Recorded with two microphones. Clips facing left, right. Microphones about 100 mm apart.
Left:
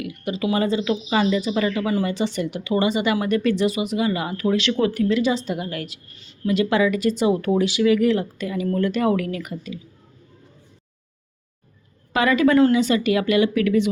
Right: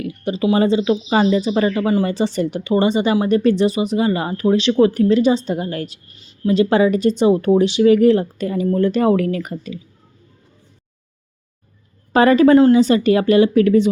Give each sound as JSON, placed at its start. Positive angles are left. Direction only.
{"t": 0.0, "sound": "speech", "side_deg": -30}
{"t": 12.1, "sound": "speech", "side_deg": -35}